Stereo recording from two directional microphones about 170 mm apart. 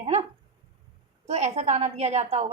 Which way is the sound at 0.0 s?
35° right (ahead or behind).